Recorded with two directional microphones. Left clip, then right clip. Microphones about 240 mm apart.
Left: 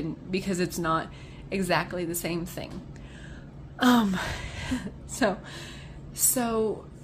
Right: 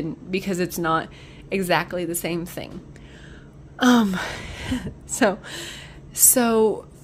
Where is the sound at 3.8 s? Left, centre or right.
Right.